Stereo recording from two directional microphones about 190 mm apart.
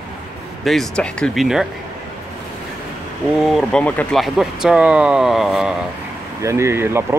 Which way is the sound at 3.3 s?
Centre (ahead or behind).